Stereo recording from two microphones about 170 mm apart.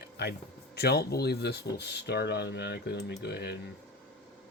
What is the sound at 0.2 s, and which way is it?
Speech, 80° left.